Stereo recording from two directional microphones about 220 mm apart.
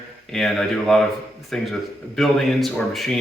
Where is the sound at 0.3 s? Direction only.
Centre (ahead or behind).